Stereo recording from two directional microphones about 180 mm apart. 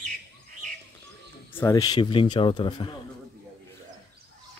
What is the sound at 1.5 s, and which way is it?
Speech, 15° left (ahead or behind).